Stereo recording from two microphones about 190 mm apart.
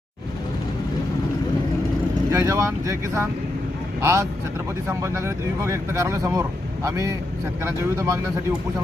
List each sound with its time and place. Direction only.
2.3 s speech: 15° right (ahead or behind)